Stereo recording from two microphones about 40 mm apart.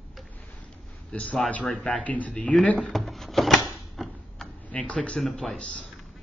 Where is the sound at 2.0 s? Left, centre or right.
Left.